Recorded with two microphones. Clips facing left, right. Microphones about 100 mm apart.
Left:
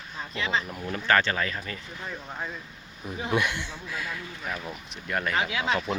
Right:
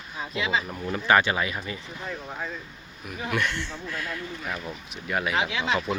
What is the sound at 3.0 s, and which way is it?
Speech, 25° left (ahead or behind).